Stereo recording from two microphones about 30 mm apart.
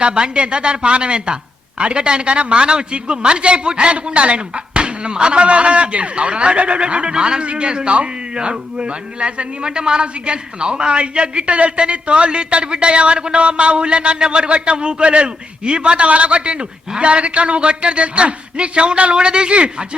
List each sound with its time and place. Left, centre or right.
0.0 s a man's voice: right